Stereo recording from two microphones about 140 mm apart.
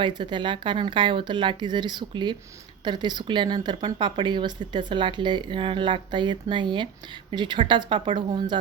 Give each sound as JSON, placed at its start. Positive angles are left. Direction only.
{"t": 0.0, "sound": "speech", "side_deg": -35}